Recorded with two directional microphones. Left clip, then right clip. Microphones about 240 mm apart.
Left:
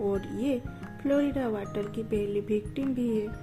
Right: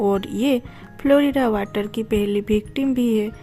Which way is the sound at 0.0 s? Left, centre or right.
Right.